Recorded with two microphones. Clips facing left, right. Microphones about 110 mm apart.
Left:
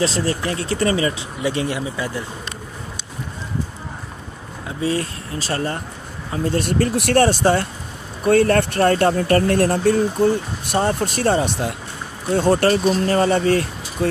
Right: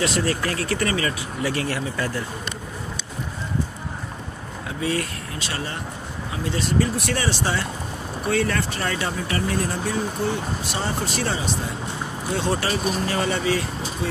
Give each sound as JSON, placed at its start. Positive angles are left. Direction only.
{"t": 0.0, "sound": "speech", "side_deg": 30}
{"t": 4.6, "sound": "speech", "side_deg": 30}
{"t": 12.4, "sound": "speech", "side_deg": 45}